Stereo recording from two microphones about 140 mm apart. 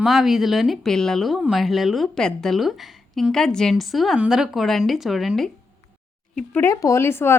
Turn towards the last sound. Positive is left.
turn(degrees=15)  # may be behind; listen again after turning